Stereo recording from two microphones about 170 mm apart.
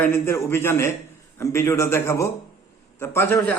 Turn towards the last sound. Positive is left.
turn(degrees=15)  # may be behind; listen again after turning